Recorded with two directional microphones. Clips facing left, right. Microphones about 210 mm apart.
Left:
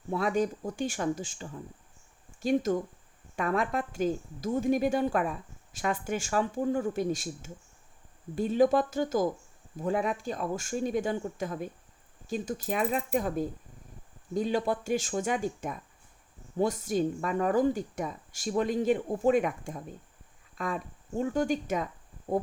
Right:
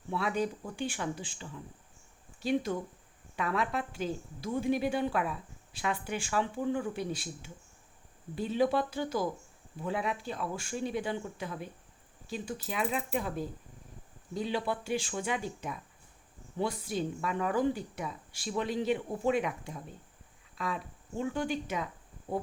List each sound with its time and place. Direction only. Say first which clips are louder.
0.1 s a woman's voice: left 4 dB; 45° left (ahead or behind)